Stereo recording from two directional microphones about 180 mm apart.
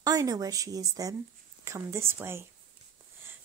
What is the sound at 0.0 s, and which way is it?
A woman's voice, 20° right (ahead or behind).